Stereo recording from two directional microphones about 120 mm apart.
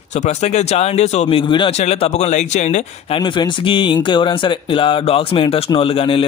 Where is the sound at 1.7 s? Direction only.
60° left (ahead or behind).